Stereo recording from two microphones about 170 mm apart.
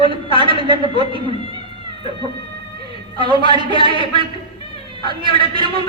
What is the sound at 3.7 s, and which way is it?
Speech, 30° left (ahead or behind).